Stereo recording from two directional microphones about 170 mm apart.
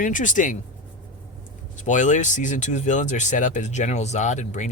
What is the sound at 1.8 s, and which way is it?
Speech, 45° left (ahead or behind).